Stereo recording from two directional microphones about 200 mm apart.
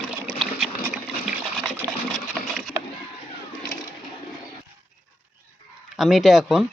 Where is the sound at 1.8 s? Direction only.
45° left (ahead or behind).